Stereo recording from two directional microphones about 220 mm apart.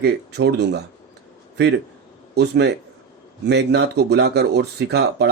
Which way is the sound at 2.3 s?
50° right (ahead or behind).